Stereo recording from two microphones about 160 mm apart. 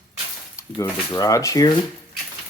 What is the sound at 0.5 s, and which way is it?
Speech, 20° left (ahead or behind).